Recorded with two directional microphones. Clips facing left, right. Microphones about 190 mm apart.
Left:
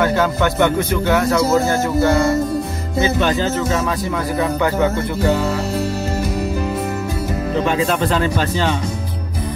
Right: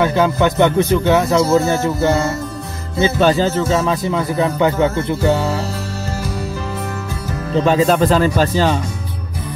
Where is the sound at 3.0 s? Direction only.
30° right (ahead or behind).